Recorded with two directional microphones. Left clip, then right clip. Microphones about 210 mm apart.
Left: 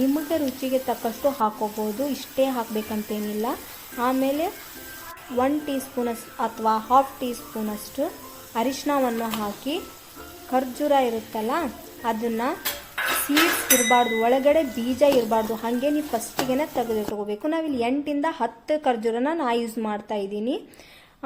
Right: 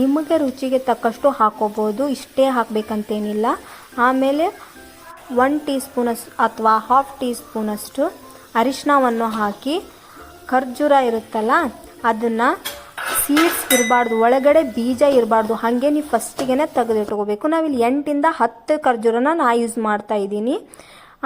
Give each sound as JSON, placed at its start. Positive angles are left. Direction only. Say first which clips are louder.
{"t": 0.1, "sound": "a woman's voice", "louder": "right 7 dB", "side_deg": -15}
{"t": 13.8, "sound": "speech", "louder": "right 4 dB", "side_deg": -20}